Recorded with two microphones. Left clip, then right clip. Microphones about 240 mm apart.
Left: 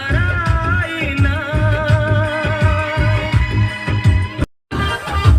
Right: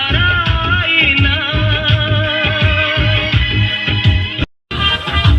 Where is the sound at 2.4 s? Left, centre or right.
Centre.